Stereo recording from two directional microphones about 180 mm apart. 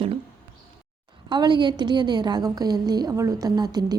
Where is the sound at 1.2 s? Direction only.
25° right (ahead or behind).